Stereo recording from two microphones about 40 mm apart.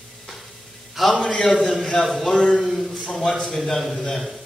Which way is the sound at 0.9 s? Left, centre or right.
Centre.